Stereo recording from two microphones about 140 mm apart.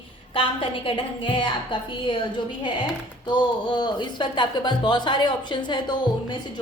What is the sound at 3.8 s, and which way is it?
Speech, 30° left (ahead or behind).